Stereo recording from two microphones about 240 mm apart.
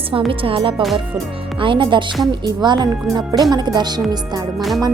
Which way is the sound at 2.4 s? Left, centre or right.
Centre.